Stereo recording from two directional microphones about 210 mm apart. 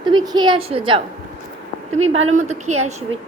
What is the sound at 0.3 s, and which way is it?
A woman's voice, 20° right (ahead or behind).